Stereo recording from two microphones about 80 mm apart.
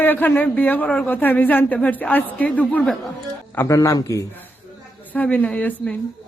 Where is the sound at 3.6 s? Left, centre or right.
Left.